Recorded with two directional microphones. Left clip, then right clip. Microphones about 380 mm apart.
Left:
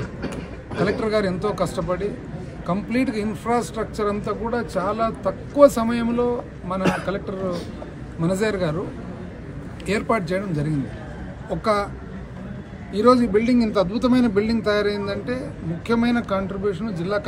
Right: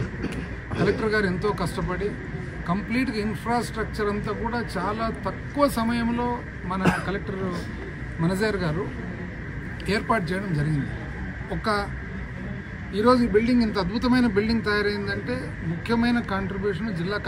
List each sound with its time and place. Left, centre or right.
0.8 s speech: centre
6.8 s a man's voice: right
8.2 s speech: centre
9.8 s speech: centre
11.6 s speech: centre
12.9 s speech: centre